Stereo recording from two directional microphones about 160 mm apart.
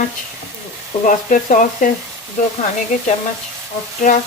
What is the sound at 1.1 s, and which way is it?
Frying, 55° left (ahead or behind).